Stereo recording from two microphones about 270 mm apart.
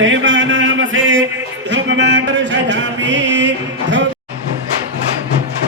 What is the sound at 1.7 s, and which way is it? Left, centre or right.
Mantra, right.